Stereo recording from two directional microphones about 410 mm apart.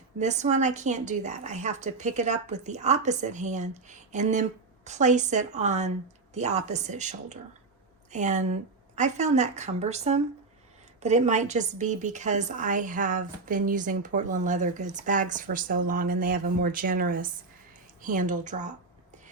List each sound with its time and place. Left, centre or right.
0.2 s a woman's voice: centre